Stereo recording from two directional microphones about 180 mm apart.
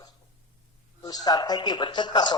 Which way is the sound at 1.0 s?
20° left (ahead or behind).